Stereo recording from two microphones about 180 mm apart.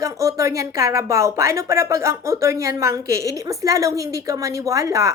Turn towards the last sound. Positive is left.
turn(degrees=-15)  # may be behind; listen again after turning